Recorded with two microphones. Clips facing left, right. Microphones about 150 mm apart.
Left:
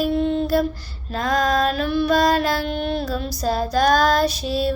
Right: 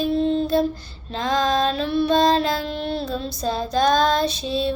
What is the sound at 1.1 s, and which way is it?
Female singing, 25° right (ahead or behind).